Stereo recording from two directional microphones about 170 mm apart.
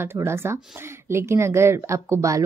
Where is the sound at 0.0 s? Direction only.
15° right (ahead or behind).